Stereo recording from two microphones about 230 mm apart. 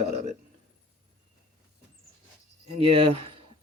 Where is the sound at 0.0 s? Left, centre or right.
Right.